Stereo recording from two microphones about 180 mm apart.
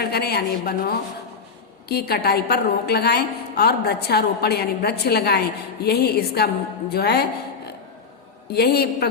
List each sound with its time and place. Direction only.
0.0 s a woman's voice: 60° left (ahead or behind)
8.4 s a woman's voice: 65° left (ahead or behind)